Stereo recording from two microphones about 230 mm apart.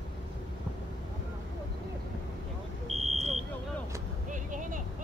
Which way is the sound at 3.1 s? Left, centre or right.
Right.